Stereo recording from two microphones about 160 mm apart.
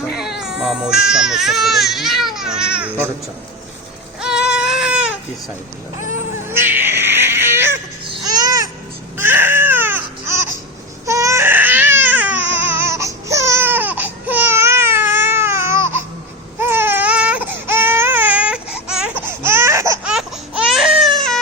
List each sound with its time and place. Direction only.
0.1 s speech: 5° right (ahead or behind)
4.2 s baby cry: 5° right (ahead or behind)
6.5 s cat: 15° right (ahead or behind)
8.2 s babbling: 25° right (ahead or behind)
9.1 s baby cry: 15° right (ahead or behind)
19.2 s laughter: 15° right (ahead or behind)
20.1 s baby cry: 5° right (ahead or behind)